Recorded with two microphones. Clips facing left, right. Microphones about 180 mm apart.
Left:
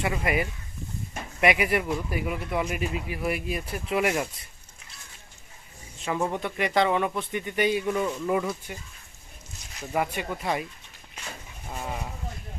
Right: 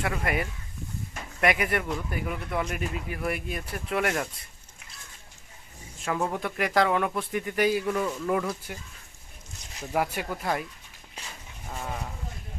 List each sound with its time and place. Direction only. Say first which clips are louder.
0.0 s speech: left 2 dB; centre (ahead or behind)
6.0 s speech: left 1 dB; centre (ahead or behind)
9.8 s speech: even; centre (ahead or behind)
11.2 s a sound: left 3 dB; 35° right (ahead or behind)
11.7 s speech: left 1 dB; 5° left (ahead or behind)